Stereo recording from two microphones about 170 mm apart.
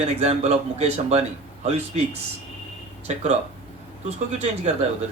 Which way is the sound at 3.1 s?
40° right (ahead or behind).